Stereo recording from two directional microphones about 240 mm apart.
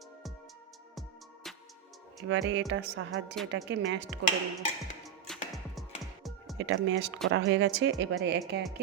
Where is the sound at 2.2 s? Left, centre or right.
Right.